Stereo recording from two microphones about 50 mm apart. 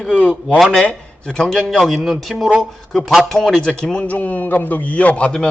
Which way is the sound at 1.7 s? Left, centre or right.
Centre.